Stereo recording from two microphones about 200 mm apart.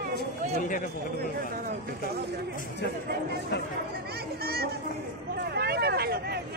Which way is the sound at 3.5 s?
60° left (ahead or behind).